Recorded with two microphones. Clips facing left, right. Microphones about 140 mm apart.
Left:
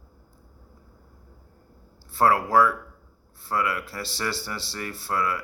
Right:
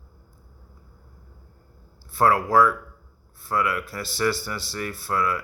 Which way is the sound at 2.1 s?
30° left (ahead or behind).